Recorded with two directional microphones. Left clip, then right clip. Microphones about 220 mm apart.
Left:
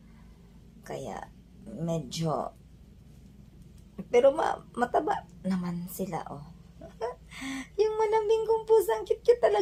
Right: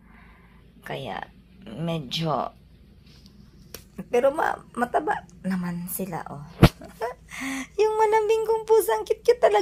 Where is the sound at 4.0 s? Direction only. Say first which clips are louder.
Right 1 dB; 20° right (ahead or behind).